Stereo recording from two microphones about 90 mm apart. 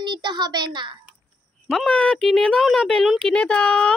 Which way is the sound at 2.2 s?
5° left (ahead or behind).